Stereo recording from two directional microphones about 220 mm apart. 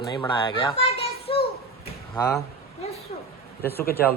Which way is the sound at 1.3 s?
25° left (ahead or behind).